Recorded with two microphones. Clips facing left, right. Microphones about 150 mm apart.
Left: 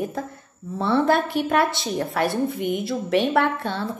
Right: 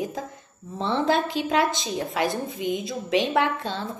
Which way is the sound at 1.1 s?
60° left (ahead or behind).